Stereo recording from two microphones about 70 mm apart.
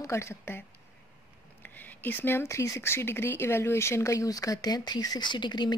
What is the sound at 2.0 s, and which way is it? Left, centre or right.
Speech, left.